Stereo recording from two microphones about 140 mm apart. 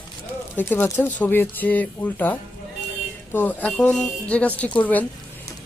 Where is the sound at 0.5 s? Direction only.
15° left (ahead or behind).